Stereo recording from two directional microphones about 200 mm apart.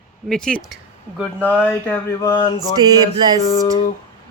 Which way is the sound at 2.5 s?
20° right (ahead or behind).